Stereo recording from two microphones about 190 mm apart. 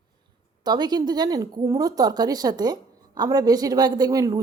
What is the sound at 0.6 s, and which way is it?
Speech, 20° right (ahead or behind).